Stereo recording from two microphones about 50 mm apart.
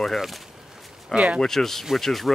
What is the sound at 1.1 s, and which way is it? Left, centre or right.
Speech, right.